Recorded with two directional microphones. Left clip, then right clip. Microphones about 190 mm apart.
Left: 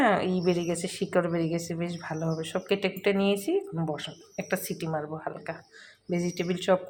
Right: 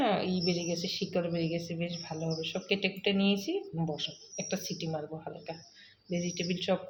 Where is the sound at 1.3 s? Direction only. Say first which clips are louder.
Left 4 dB; 70° left (ahead or behind).